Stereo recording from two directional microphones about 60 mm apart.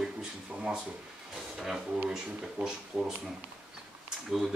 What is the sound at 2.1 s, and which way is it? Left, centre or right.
Speech, centre.